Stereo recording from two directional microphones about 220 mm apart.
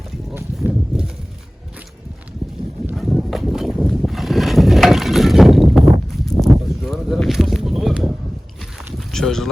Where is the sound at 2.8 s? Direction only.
Centre (ahead or behind).